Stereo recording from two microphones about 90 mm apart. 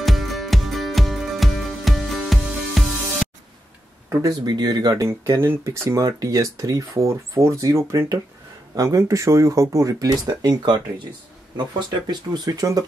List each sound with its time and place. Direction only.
0.0 s music: centre (ahead or behind)
4.5 s speech: 50° right (ahead or behind)